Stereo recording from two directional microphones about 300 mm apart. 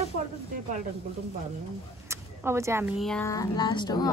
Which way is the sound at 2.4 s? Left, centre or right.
Centre.